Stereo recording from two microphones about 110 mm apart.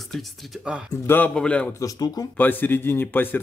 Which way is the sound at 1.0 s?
20° left (ahead or behind).